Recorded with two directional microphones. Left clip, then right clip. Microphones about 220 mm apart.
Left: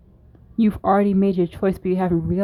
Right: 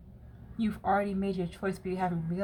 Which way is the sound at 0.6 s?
40° left (ahead or behind).